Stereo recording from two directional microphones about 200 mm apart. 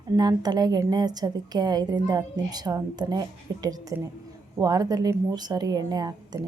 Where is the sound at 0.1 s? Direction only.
20° right (ahead or behind).